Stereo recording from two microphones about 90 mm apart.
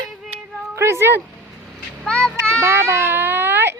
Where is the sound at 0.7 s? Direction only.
30° right (ahead or behind).